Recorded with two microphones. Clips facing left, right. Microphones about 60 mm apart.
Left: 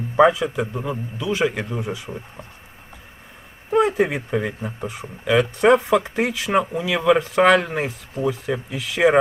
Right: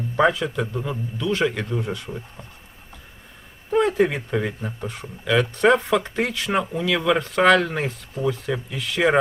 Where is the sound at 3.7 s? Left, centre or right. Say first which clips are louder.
Left 1 dB; centre.